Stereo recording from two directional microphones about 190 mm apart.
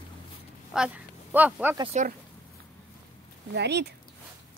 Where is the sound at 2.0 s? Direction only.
40° right (ahead or behind).